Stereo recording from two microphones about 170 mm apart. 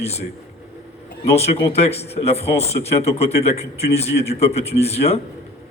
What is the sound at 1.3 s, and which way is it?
A man's voice, 35° left (ahead or behind).